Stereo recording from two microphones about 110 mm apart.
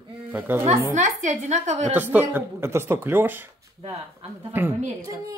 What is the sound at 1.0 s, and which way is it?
Speech, 90° right.